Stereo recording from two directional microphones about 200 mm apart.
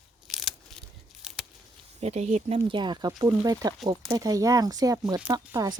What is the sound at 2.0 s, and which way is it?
Speech, 35° right (ahead or behind).